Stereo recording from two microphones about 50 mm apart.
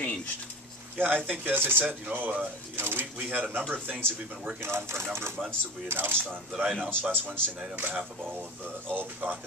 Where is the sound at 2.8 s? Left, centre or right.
Right.